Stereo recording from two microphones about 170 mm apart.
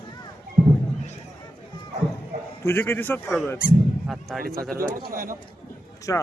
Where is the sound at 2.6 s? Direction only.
15° left (ahead or behind).